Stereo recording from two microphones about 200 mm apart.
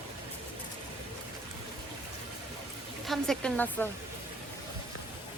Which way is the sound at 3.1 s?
5° left (ahead or behind).